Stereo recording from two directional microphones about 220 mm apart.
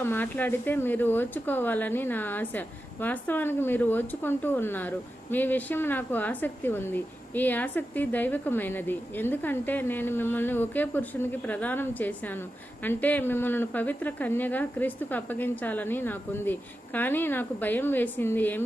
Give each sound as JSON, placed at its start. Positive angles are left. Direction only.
{"t": 0.0, "sound": "speech", "side_deg": 10}